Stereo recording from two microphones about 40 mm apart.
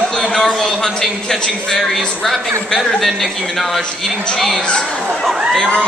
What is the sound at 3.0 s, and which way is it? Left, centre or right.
Speech, centre.